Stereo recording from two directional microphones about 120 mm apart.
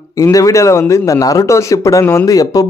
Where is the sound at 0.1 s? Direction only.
30° left (ahead or behind).